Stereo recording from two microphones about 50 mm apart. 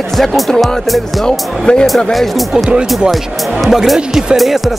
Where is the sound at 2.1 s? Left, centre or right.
Centre.